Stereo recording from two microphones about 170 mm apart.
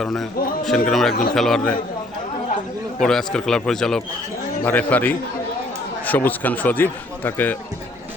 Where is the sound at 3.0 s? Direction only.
5° left (ahead or behind).